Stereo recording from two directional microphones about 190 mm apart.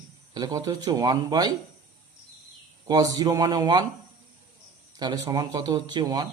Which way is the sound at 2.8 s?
20° right (ahead or behind).